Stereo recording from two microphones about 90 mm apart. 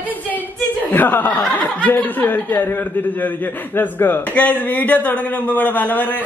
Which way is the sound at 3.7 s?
20° left (ahead or behind).